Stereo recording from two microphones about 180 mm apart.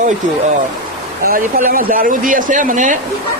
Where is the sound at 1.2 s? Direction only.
50° right (ahead or behind).